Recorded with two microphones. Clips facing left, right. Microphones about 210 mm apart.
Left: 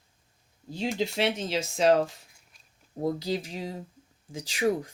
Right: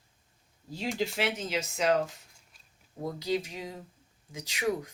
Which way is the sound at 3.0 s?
30° left (ahead or behind).